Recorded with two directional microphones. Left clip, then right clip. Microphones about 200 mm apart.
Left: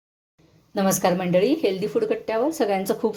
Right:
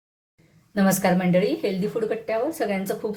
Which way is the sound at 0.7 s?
20° left (ahead or behind).